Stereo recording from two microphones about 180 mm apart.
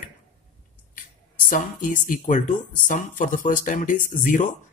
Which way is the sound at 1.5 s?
45° left (ahead or behind).